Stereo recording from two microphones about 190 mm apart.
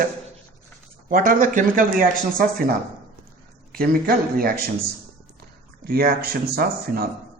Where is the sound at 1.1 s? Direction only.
45° right (ahead or behind).